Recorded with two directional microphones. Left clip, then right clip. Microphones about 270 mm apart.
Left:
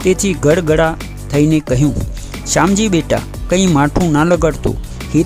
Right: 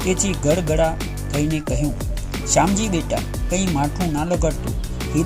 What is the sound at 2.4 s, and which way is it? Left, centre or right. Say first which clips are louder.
Speech: left 5 dB; left.